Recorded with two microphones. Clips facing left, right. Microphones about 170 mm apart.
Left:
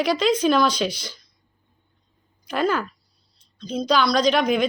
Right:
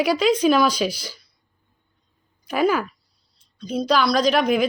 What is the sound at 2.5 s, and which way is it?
Speech, 5° right (ahead or behind).